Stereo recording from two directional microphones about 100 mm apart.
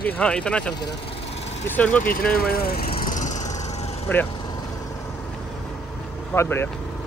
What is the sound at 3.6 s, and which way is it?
Vehicle, 90° left.